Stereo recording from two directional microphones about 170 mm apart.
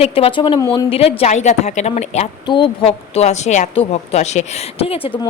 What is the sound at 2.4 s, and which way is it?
Speech, 30° left (ahead or behind).